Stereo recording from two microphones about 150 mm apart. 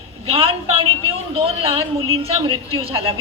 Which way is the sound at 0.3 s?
40° right (ahead or behind).